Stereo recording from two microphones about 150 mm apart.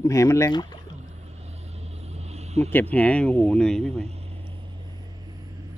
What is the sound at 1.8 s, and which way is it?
Vehicle, 45° right (ahead or behind).